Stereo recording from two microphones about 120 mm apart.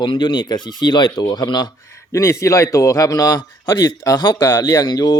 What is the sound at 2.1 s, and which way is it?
Speech, 25° left (ahead or behind).